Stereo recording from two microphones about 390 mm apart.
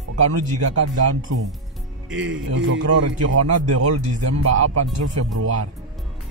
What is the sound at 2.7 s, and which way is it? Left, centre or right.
Speech, right.